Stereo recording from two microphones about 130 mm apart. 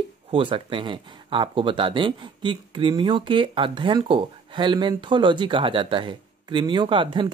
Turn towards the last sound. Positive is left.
turn(degrees=-40)  # may be behind; listen again after turning